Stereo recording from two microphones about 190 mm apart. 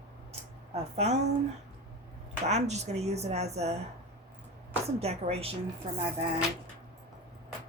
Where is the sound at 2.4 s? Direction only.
35° right (ahead or behind).